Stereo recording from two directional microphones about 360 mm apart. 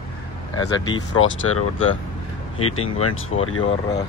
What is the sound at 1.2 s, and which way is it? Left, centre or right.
Speech, left.